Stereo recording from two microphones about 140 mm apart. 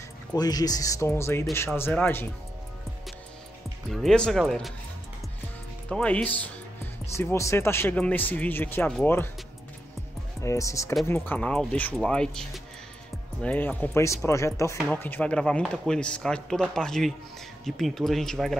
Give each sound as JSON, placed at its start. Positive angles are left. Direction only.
{"t": 0.3, "sound": "speech", "side_deg": 30}
{"t": 3.9, "sound": "speech", "side_deg": 5}
{"t": 5.9, "sound": "speech", "side_deg": 5}
{"t": 10.4, "sound": "speech", "side_deg": 20}
{"t": 15.0, "sound": "speech", "side_deg": 10}